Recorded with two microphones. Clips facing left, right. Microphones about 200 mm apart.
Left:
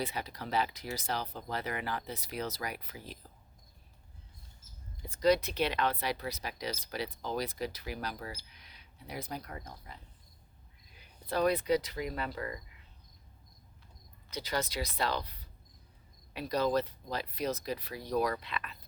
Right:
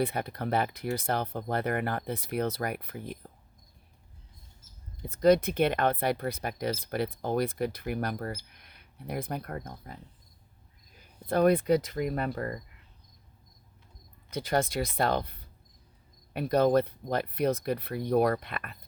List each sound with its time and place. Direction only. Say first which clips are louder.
0.0 s speech: right 7 dB; 55° right (ahead or behind)
5.2 s speech: right 5 dB; 50° right (ahead or behind)
14.3 s speech: right 7 dB; 50° right (ahead or behind)